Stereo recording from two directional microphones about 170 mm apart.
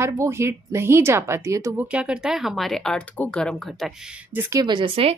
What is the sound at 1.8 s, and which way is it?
Speech, 5° right (ahead or behind).